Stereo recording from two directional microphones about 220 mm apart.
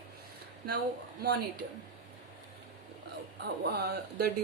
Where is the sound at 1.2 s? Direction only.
45° right (ahead or behind).